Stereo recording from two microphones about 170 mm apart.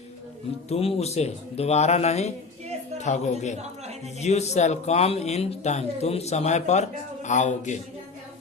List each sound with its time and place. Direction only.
0.7 s a woman's voice: 35° left (ahead or behind)